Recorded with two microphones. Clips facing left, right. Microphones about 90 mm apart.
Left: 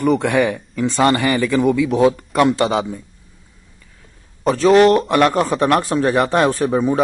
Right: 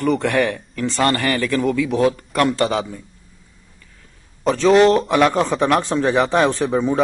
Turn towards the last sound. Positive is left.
turn(degrees=5)  # may be behind; listen again after turning